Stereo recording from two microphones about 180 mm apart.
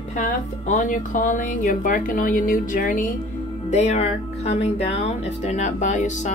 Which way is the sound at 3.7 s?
40° left (ahead or behind).